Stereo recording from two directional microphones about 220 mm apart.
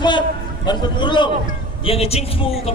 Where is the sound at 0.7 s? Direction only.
20° left (ahead or behind).